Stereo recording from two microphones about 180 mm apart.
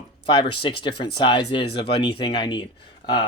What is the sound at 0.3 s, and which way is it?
Speech, 30° left (ahead or behind).